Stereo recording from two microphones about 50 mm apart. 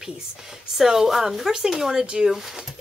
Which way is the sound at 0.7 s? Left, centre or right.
Centre.